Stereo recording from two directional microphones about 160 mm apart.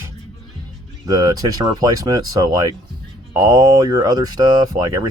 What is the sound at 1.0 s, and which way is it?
Speech, 20° right (ahead or behind).